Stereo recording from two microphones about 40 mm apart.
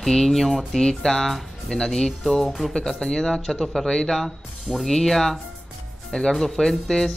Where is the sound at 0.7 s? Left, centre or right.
Centre.